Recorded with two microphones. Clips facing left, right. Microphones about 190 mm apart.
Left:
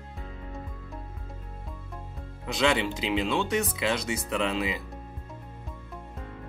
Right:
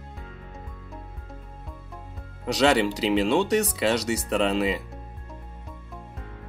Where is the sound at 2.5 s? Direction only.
40° right (ahead or behind).